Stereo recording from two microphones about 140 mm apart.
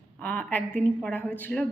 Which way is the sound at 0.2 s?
10° left (ahead or behind).